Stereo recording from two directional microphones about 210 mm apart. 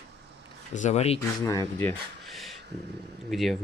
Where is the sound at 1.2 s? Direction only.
15° left (ahead or behind).